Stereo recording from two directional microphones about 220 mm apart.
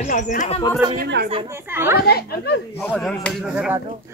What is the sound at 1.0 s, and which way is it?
Speech, 50° right (ahead or behind).